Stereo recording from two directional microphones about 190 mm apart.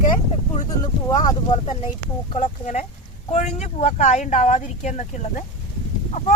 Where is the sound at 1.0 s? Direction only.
25° left (ahead or behind).